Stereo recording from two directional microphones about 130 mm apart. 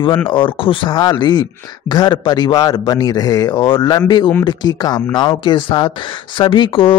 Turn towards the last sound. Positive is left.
turn(degrees=45)  # may be behind; listen again after turning